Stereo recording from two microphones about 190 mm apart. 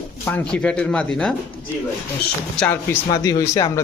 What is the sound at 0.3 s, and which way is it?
Speech, 5° left (ahead or behind).